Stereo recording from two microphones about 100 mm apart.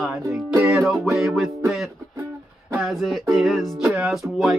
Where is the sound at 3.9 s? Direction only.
15° right (ahead or behind).